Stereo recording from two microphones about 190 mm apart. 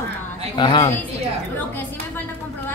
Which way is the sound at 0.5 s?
25° left (ahead or behind).